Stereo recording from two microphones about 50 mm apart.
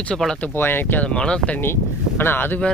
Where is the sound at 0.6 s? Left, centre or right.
Left.